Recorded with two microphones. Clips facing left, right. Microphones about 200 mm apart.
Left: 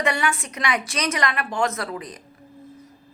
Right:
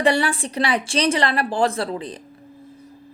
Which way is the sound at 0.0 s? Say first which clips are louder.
Right 5 dB; 35° right (ahead or behind).